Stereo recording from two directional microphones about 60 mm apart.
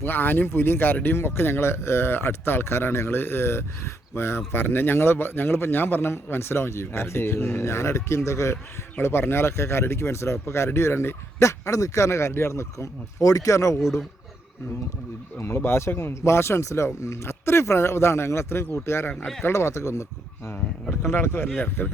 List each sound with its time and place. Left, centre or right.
0.0 s speech: left
7.6 s speech: left
9.0 s speech: left
15.5 s speech: left
21.0 s speech: left